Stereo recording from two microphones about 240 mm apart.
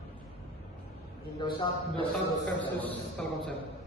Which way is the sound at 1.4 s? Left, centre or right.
Centre.